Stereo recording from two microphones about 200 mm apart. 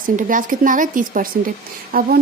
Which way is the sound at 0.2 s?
40° right (ahead or behind).